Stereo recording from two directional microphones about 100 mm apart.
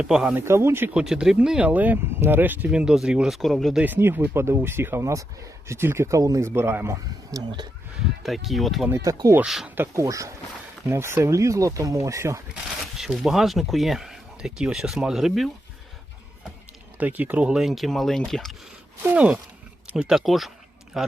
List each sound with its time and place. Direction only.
0.0 s speech: 10° right (ahead or behind)
0.3 s speech: 25° right (ahead or behind)
0.9 s speech: 5° right (ahead or behind)
2.6 s speech: 5° right (ahead or behind)
3.8 s speech: 20° right (ahead or behind)
7.3 s speech: 40° right (ahead or behind)
8.4 s speech: centre (ahead or behind)
8.9 s speech: 30° right (ahead or behind)
9.4 s speech: 5° right (ahead or behind)
9.6 s speech: 20° right (ahead or behind)
13.0 s speech: 5° right (ahead or behind)
17.0 s speech: 15° right (ahead or behind); by 18.5 s 5° left (ahead or behind)
19.0 s a man's voice: 10° right (ahead or behind)